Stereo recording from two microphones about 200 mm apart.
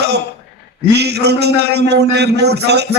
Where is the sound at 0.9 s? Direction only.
55° right (ahead or behind).